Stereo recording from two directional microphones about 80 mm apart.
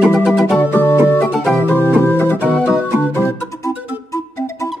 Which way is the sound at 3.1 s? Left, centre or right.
Left.